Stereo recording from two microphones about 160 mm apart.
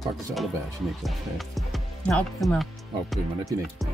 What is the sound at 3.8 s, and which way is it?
Music, centre (ahead or behind).